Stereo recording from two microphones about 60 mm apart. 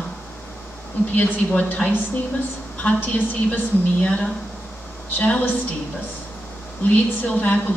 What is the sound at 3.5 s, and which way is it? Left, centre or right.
A woman's voice, left.